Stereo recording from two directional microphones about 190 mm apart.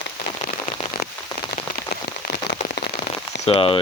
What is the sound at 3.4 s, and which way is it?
Speech, 30° left (ahead or behind).